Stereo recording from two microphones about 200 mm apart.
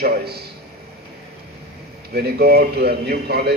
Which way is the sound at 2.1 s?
50° right (ahead or behind).